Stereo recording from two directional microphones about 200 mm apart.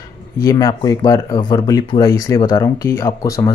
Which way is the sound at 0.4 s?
20° left (ahead or behind).